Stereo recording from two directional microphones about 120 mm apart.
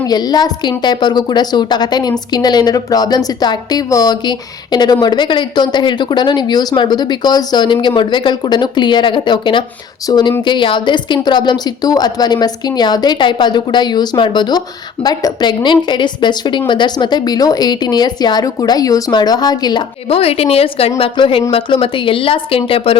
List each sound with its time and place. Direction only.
0.1 s a woman's voice: 35° left (ahead or behind)
20.1 s a woman's voice: 55° left (ahead or behind)